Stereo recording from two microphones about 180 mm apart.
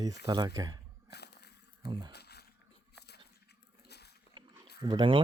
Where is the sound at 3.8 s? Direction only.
65° left (ahead or behind).